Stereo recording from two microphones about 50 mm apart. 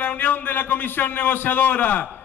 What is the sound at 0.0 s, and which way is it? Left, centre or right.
A man's voice, left.